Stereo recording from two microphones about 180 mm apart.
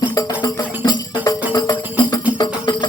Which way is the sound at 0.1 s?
20° left (ahead or behind).